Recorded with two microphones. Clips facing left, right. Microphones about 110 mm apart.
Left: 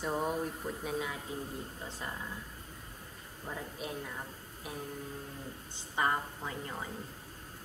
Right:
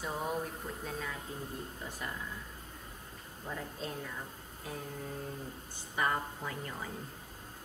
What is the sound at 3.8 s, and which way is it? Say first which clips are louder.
Speech: left 1 dB; 15° left (ahead or behind).